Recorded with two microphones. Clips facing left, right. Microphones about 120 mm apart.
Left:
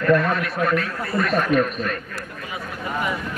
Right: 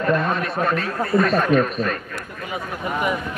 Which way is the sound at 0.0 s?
25° right (ahead or behind).